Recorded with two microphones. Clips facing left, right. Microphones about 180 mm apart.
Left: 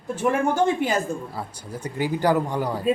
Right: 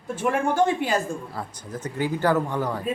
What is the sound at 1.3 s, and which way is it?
Speech, 10° left (ahead or behind).